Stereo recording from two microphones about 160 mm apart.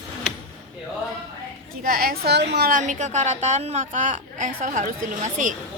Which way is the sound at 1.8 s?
70° right (ahead or behind).